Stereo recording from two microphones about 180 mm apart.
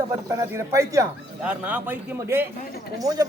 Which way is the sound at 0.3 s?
15° right (ahead or behind).